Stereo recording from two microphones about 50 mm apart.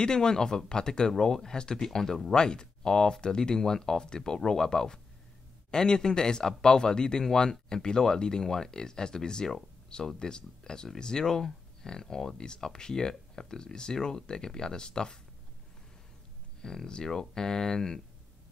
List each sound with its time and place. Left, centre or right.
0.0 s a man's voice: centre
16.6 s a man's voice: centre